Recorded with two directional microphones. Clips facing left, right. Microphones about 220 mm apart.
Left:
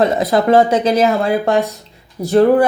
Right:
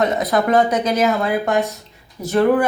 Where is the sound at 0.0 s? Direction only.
30° left (ahead or behind).